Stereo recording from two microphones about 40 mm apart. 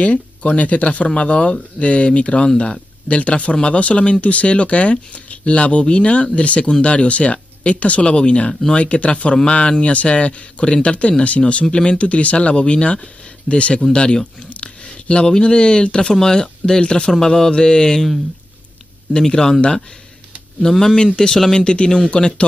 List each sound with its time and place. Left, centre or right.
0.0 s speech: left; by 17.1 s centre
17.1 s mantra: centre
19.1 s mantra: centre
20.6 s mantra: centre
21.5 s speech: left